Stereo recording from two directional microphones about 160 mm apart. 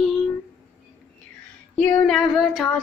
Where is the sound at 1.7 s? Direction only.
5° left (ahead or behind).